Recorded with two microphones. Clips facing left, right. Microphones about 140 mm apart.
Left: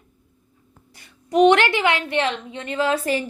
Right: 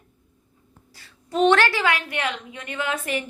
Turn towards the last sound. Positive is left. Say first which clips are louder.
# left 6 dB
turn(degrees=35)  # may be behind; listen again after turning